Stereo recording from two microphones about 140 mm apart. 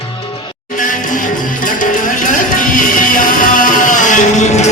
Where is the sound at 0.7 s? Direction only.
70° left (ahead or behind).